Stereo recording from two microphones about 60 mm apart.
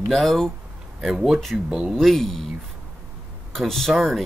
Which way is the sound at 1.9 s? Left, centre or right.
Centre.